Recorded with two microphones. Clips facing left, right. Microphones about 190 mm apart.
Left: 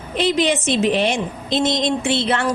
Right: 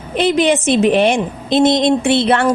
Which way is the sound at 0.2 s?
55° right (ahead or behind).